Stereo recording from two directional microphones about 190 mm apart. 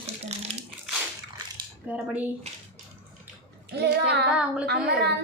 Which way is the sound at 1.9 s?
10° right (ahead or behind).